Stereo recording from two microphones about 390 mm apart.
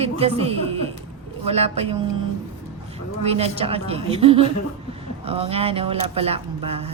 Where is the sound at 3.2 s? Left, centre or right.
Centre.